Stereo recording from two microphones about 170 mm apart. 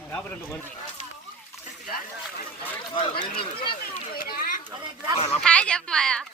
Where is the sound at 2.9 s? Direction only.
30° left (ahead or behind).